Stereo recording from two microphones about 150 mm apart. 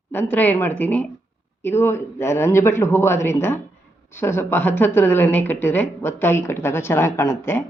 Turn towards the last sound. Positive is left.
turn(degrees=15)  # may be behind; listen again after turning